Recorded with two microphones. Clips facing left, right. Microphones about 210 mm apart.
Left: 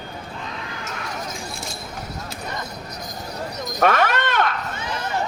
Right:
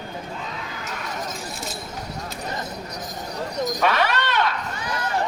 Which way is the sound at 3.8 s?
50° left (ahead or behind).